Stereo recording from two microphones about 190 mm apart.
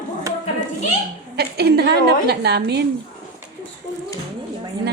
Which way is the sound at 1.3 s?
55° right (ahead or behind).